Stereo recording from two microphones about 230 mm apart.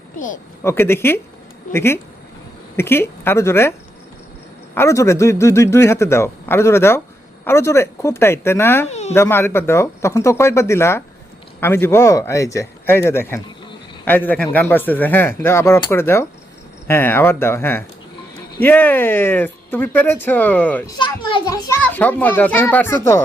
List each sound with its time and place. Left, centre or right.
0.6 s a man's voice: centre
8.9 s a sound: left
9.1 s a man's voice: centre
21.0 s a man's voice: left